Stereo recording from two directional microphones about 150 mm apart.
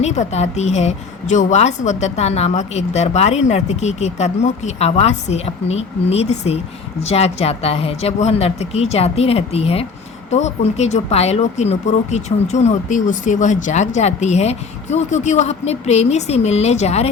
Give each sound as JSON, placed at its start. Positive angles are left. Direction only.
{"t": 0.0, "sound": "speech", "side_deg": 50}